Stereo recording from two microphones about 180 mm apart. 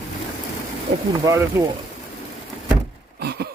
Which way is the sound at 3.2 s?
65° right (ahead or behind).